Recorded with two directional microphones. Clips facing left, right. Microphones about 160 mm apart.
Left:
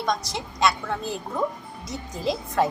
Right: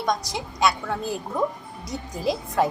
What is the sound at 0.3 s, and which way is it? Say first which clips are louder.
A woman's voice: even; 10° right (ahead or behind).